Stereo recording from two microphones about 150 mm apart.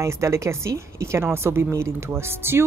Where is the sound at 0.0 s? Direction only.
20° right (ahead or behind).